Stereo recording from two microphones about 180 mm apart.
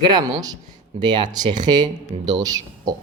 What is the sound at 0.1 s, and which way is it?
A man's voice, 20° right (ahead or behind).